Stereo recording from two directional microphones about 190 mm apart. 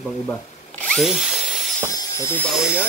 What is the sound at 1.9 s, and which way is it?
Speech, 15° left (ahead or behind).